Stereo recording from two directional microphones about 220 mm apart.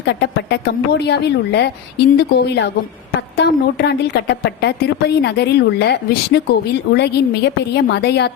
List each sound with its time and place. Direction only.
0.0 s a woman's voice: 50° left (ahead or behind)